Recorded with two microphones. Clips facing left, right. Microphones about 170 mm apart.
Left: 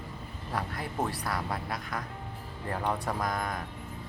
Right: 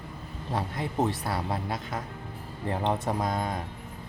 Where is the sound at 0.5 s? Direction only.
25° right (ahead or behind).